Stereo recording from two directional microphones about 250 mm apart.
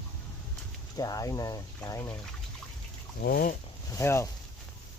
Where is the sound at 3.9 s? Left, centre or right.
Centre.